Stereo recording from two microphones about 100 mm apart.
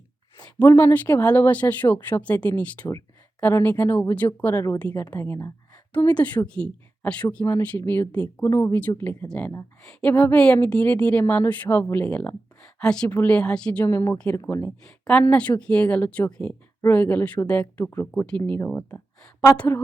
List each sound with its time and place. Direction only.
0.8 s speech: 20° left (ahead or behind)
8.4 s speech: 25° left (ahead or behind)
9.2 s speech: 10° left (ahead or behind)
13.8 s speech: 20° left (ahead or behind)
14.8 s speech: 10° left (ahead or behind)